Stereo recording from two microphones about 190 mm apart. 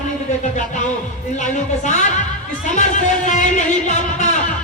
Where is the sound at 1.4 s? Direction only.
40° left (ahead or behind).